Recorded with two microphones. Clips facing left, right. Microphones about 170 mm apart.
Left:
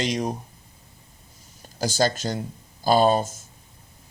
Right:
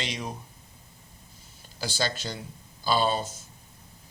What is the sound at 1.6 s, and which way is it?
Speech, 45° left (ahead or behind).